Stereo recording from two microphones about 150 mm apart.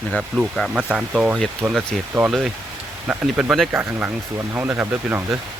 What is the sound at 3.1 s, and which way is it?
Speech, 5° right (ahead or behind).